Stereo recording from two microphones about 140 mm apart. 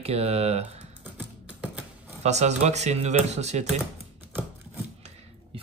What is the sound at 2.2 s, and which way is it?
Speech, 55° right (ahead or behind).